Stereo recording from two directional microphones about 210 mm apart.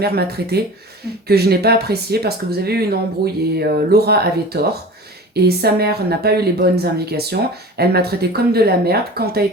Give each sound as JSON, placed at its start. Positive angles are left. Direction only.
{"t": 0.0, "sound": "speech", "side_deg": -50}